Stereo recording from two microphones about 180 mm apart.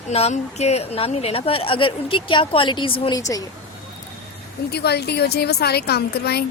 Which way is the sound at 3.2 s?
20° left (ahead or behind).